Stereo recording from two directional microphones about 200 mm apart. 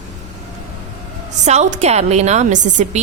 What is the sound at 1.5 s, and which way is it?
A woman's voice, 35° right (ahead or behind).